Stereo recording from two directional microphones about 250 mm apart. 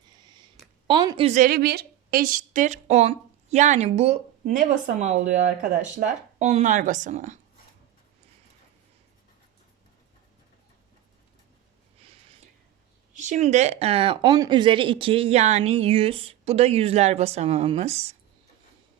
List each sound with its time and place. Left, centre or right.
0.3 s a woman's voice: centre
13.1 s a woman's voice: right